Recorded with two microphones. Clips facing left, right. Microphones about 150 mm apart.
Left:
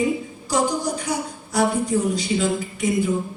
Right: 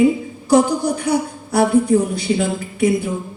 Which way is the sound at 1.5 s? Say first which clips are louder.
Right 6 dB; 60° right (ahead or behind).